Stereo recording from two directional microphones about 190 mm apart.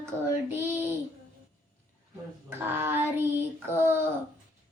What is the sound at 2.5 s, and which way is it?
Child singing, 10° right (ahead or behind).